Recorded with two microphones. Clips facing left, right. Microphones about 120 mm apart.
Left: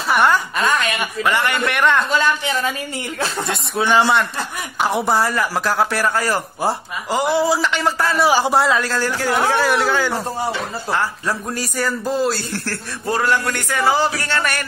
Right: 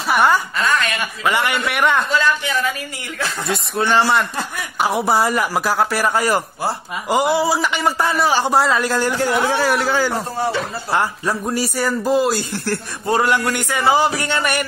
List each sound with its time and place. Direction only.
0.1 s a woman's voice: 5° right (ahead or behind)
0.6 s a woman's voice: 20° left (ahead or behind)
1.2 s a man's voice: 10° right (ahead or behind)
2.1 s speech: 25° left (ahead or behind)
4.7 s a man's voice: 5° right (ahead or behind)
5.2 s a man's voice: 15° right (ahead or behind)
8.3 s a man's voice: 5° left (ahead or behind)
8.8 s a man's voice: 15° right (ahead or behind)